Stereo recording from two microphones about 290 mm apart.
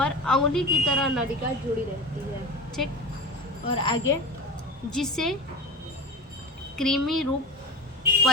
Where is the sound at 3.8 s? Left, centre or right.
Centre.